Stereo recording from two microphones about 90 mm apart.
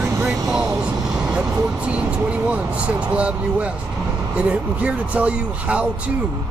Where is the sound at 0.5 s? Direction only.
10° right (ahead or behind).